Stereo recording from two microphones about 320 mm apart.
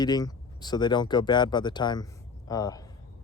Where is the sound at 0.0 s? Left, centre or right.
Centre.